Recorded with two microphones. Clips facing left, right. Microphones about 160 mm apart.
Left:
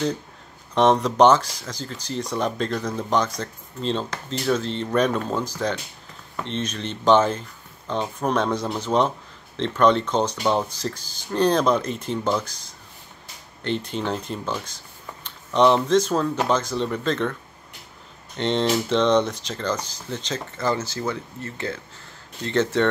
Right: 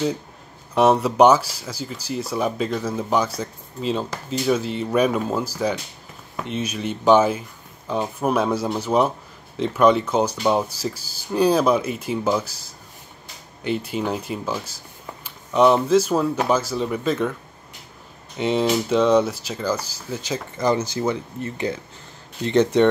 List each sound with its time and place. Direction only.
0.7 s speech: 10° right (ahead or behind)